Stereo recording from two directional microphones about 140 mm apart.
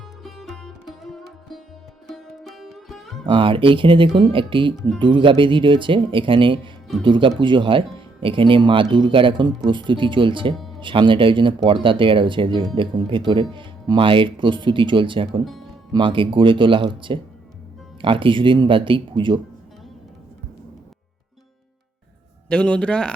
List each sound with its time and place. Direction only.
0.2 s music: centre (ahead or behind)
3.2 s speech: 40° right (ahead or behind)
22.4 s a man's voice: 5° left (ahead or behind)